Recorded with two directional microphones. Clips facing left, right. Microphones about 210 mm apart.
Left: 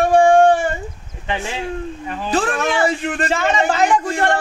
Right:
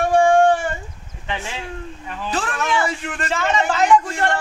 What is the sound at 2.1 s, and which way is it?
Chopping, 35° left (ahead or behind).